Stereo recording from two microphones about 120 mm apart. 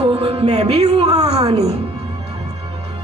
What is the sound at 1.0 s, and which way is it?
Speech, 35° right (ahead or behind).